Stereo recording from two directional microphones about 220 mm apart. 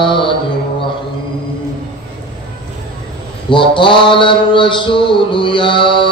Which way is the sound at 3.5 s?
20° left (ahead or behind).